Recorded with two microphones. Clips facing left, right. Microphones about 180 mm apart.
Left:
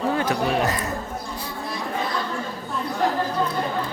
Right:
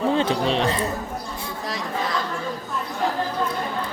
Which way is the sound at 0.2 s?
25° right (ahead or behind).